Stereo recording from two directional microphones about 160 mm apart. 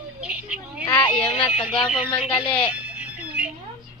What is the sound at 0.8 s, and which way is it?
Speech, 25° left (ahead or behind).